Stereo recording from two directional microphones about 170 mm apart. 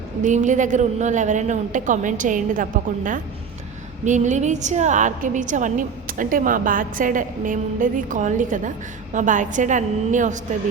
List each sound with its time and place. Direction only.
0.2 s a woman's voice: 45° right (ahead or behind)